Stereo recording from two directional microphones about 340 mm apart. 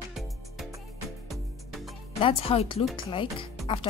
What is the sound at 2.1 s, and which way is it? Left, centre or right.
Speech, centre.